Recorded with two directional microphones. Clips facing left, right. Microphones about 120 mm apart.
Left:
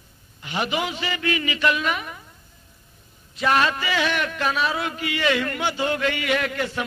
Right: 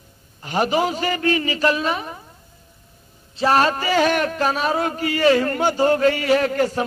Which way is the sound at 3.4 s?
35° right (ahead or behind).